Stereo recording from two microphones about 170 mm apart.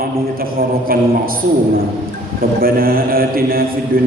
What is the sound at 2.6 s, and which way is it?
A man's voice, 60° right (ahead or behind).